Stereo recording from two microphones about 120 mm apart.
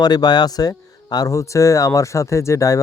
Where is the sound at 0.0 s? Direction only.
35° left (ahead or behind).